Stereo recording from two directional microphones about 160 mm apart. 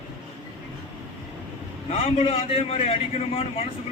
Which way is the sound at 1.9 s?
35° left (ahead or behind).